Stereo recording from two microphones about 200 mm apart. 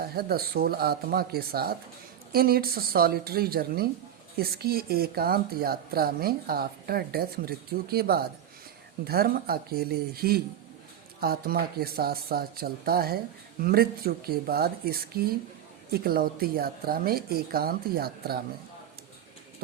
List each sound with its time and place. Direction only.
0.0 s speech: 50° right (ahead or behind)